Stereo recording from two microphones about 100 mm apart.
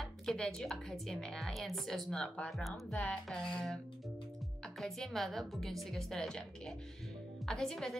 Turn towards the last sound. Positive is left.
turn(degrees=5)  # may be behind; listen again after turning